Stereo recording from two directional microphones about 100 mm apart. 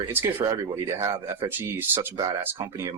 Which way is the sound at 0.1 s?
25° right (ahead or behind).